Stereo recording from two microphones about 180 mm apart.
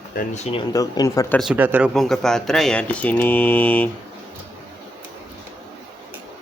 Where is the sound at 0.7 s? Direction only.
20° left (ahead or behind).